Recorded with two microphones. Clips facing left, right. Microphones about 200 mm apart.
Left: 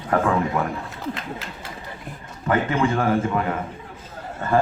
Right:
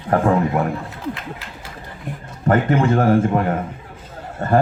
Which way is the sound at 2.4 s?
45° right (ahead or behind).